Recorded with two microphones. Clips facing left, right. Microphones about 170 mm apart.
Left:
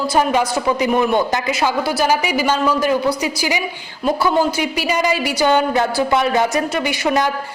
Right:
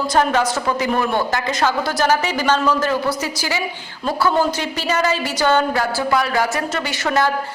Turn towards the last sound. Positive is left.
turn(degrees=15)  # may be behind; listen again after turning